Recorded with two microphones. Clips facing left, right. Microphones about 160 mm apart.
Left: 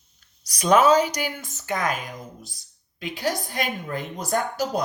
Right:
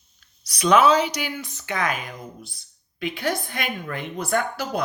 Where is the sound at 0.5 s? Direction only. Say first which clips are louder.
Even; 45° left (ahead or behind).